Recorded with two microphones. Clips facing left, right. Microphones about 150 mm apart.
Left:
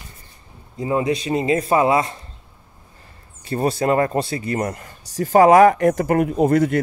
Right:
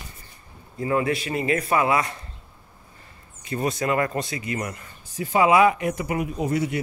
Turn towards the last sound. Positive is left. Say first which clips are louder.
# left 8 dB
turn(degrees=55)  # may be behind; listen again after turning